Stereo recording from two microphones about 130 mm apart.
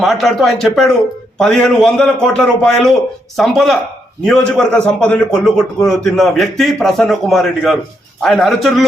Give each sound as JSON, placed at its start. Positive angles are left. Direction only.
{"t": 0.0, "sound": "a man's voice", "side_deg": 0}